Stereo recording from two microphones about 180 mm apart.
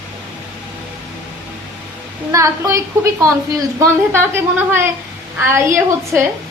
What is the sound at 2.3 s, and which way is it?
A woman's voice, 15° right (ahead or behind).